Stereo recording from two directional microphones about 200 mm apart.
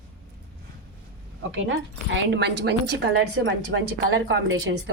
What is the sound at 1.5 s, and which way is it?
A woman's voice, 70° right (ahead or behind).